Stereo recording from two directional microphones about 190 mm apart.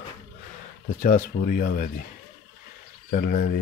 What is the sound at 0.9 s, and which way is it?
Speech, 45° left (ahead or behind).